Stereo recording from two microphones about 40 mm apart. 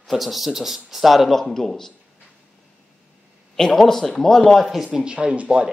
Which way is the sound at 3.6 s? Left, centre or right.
Centre.